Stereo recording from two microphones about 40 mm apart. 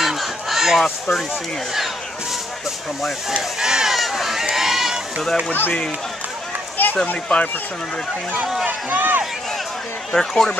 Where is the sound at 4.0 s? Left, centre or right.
Centre.